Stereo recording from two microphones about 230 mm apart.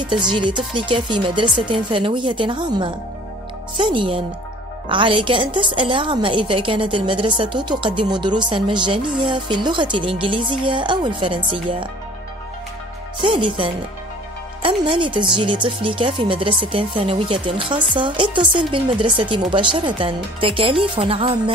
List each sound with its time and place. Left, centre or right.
0.0 s a woman's voice: centre
13.2 s a woman's voice: right